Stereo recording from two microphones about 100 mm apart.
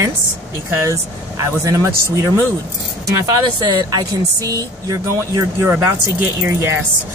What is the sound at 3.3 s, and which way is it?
Speech, 35° right (ahead or behind).